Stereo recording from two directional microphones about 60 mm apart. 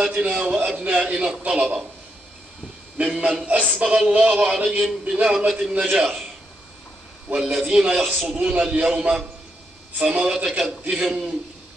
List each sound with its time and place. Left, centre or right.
0.0 s a man's voice: right
3.2 s a man's voice: centre
4.5 s a man's voice: centre
5.9 s a man's voice: centre
7.3 s a man's voice: centre